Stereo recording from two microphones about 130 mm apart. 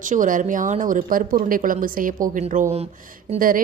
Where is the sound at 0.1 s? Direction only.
90° right.